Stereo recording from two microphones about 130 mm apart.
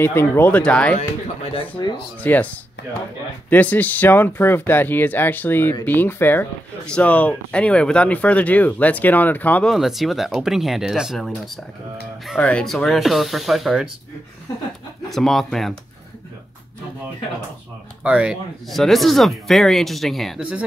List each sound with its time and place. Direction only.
0.0 s speech: 15° left (ahead or behind)
1.8 s speech: 35° left (ahead or behind)
2.2 s speech: 15° left (ahead or behind)
9.8 s speech: centre (ahead or behind)
15.0 s speech: centre (ahead or behind)
18.0 s speech: 5° right (ahead or behind)